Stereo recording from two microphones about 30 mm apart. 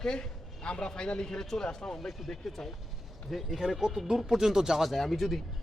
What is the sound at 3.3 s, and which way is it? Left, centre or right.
Speech, centre.